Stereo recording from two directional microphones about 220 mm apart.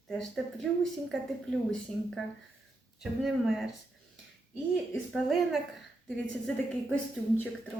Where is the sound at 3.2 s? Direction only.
Centre (ahead or behind).